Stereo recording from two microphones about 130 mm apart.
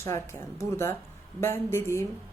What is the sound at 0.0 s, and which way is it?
Speech, 20° left (ahead or behind).